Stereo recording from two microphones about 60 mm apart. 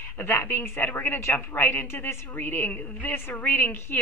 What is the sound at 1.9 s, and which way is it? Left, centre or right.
A woman's voice, left.